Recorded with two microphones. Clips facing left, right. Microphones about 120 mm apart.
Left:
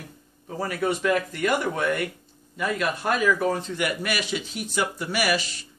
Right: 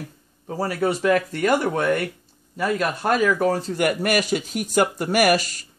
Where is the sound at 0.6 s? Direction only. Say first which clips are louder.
Right 3 dB; 35° right (ahead or behind).